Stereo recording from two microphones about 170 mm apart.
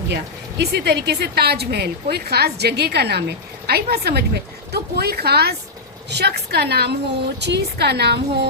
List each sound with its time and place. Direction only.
0.1 s a woman's voice: 75° right (ahead or behind)